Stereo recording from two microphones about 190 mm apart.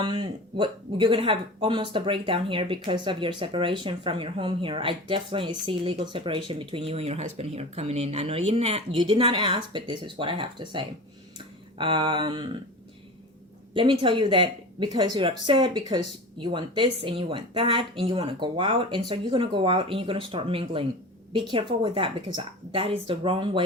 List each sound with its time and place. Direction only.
0.0 s speech: 25° right (ahead or behind)
13.7 s speech: 25° right (ahead or behind)